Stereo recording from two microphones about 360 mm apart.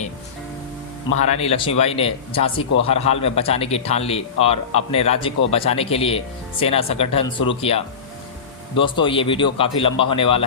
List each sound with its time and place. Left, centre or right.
1.2 s a man's voice: centre